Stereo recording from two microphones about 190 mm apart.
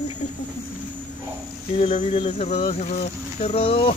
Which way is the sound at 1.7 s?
30° left (ahead or behind).